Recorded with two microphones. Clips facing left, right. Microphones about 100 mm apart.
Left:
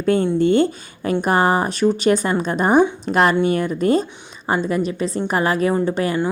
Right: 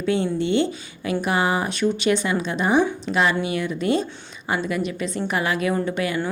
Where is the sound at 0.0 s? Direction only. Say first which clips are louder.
Left 5 dB; 45° left (ahead or behind).